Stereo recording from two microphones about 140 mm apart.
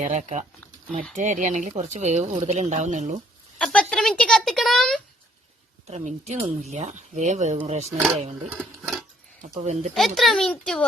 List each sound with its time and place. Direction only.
0.0 s speech: 60° right (ahead or behind)
3.6 s speech: 5° left (ahead or behind)
5.9 s speech: 50° right (ahead or behind)
9.4 s speech: 55° right (ahead or behind)
9.9 s speech: centre (ahead or behind)